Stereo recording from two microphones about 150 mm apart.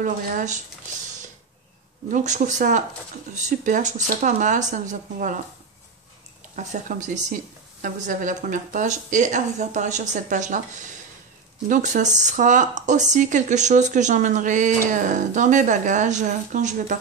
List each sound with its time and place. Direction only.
0.0 s speech: 60° right (ahead or behind)
2.0 s speech: 55° right (ahead or behind)
6.5 s speech: 55° right (ahead or behind)
11.7 s speech: 55° right (ahead or behind)